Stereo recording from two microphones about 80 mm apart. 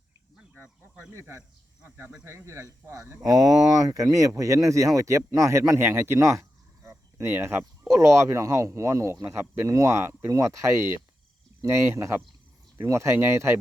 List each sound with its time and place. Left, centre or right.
1.1 s speech: right
3.2 s speech: right
7.3 s speech: right